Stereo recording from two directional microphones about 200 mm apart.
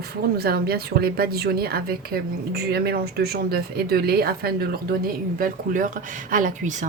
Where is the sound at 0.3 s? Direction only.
50° right (ahead or behind).